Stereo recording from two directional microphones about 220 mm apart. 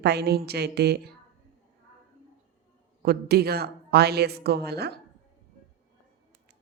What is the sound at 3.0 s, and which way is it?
A woman's voice, 45° right (ahead or behind).